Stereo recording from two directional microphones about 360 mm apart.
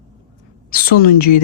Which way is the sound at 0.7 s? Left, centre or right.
Left.